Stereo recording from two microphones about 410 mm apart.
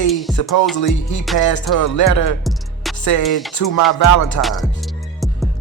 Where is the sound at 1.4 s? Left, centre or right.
Left.